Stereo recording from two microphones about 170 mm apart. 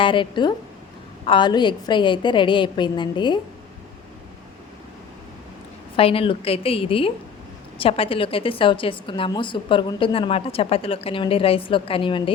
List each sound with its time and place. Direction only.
0.0 s a woman's voice: 30° left (ahead or behind)
6.0 s a woman's voice: 35° left (ahead or behind)